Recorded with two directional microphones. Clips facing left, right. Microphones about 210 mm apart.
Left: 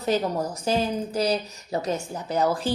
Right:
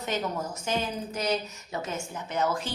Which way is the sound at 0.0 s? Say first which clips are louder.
Left 6 dB; 35° left (ahead or behind).